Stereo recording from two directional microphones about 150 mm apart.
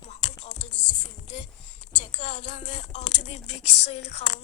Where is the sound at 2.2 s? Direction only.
50° left (ahead or behind).